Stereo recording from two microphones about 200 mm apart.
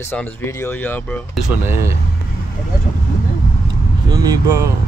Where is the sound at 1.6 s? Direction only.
15° right (ahead or behind).